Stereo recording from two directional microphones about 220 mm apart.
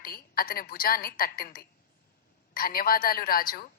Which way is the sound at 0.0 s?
40° left (ahead or behind).